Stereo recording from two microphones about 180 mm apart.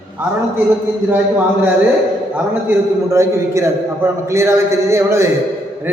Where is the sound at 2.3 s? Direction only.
10° right (ahead or behind).